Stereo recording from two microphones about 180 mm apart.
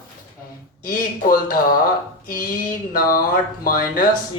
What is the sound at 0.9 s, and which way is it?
Speech, 50° left (ahead or behind).